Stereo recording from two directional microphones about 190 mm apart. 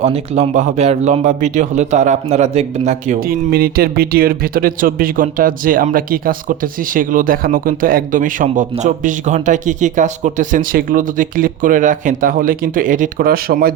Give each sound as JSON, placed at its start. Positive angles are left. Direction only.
{"t": 0.0, "sound": "speech", "side_deg": -35}